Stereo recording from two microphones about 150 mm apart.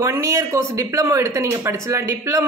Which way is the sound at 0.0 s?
20° right (ahead or behind).